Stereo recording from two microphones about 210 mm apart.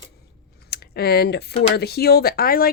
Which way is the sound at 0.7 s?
50° left (ahead or behind).